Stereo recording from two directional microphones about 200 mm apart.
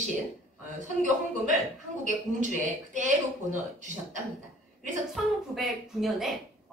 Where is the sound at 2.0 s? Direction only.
40° right (ahead or behind).